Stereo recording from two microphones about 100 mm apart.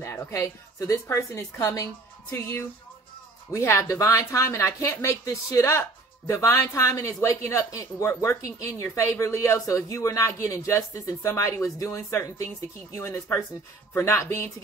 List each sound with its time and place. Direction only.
0.0 s a woman's voice: 25° left (ahead or behind)